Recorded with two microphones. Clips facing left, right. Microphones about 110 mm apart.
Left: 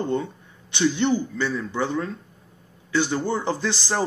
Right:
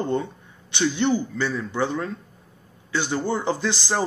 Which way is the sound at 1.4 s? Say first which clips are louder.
Right 1 dB; 20° right (ahead or behind).